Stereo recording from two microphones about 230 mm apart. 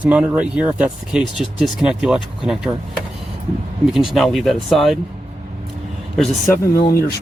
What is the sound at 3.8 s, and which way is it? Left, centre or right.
Speech, centre.